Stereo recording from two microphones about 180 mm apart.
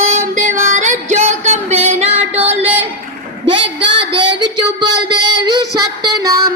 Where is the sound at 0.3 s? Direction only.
45° right (ahead or behind).